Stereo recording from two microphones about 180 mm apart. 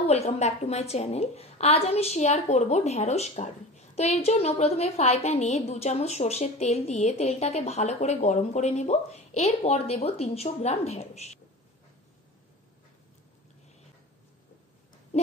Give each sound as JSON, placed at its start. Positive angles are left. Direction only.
{"t": 0.0, "sound": "a woman's voice", "side_deg": 35}